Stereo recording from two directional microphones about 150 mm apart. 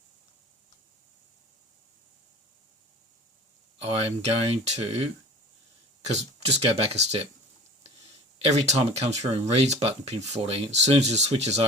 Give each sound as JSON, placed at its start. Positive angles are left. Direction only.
{"t": 3.8, "sound": "speech", "side_deg": -45}
{"t": 8.4, "sound": "speech", "side_deg": -45}